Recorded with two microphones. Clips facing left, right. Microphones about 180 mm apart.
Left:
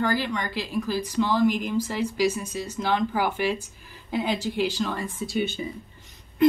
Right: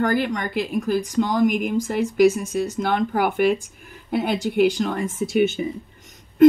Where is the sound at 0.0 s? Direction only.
50° right (ahead or behind).